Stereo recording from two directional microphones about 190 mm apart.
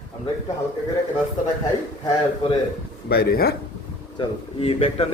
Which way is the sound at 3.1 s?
55° left (ahead or behind).